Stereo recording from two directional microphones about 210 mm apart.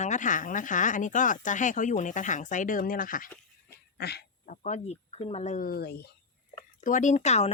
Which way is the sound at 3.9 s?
50° left (ahead or behind).